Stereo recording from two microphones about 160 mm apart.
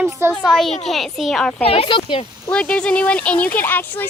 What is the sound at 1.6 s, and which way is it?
Speech, 35° left (ahead or behind).